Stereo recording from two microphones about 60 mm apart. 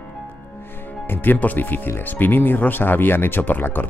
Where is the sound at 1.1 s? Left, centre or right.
Left.